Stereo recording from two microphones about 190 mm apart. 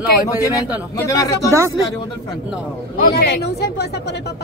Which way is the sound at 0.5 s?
20° left (ahead or behind).